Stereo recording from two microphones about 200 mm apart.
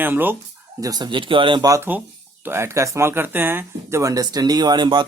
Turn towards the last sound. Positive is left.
turn(degrees=-20)  # may be behind; listen again after turning